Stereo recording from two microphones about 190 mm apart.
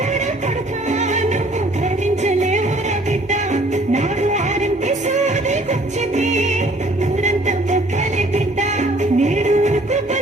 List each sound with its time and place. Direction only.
0.9 s music: 40° right (ahead or behind)